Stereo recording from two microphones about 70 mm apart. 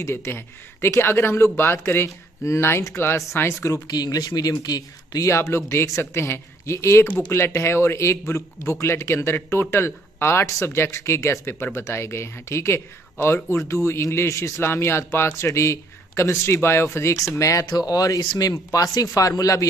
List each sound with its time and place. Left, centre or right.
0.0 s a man's voice: left
3.8 s speech: left
5.3 s a man's voice: left
17.6 s speech: left